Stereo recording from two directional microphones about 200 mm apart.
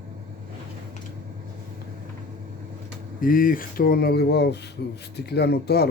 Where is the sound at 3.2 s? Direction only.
45° left (ahead or behind).